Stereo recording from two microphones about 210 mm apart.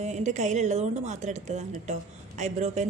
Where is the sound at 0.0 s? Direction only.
35° right (ahead or behind).